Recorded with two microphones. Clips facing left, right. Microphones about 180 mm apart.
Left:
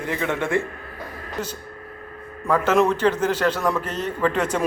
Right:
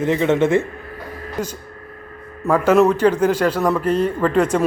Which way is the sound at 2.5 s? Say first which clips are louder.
Right 5 dB; 10° right (ahead or behind).